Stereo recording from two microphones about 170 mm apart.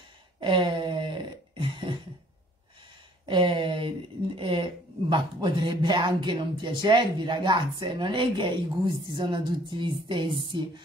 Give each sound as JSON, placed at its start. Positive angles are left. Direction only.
{"t": 0.4, "sound": "throat clearing", "side_deg": -30}
{"t": 3.3, "sound": "a sound", "side_deg": -30}
{"t": 5.1, "sound": "speech", "side_deg": -25}